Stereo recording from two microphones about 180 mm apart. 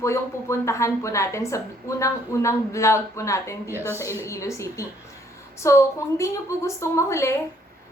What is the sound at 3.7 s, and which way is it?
Speech, 10° right (ahead or behind).